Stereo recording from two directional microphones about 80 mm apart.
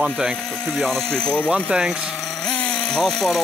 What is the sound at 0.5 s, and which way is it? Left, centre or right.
Speech, centre.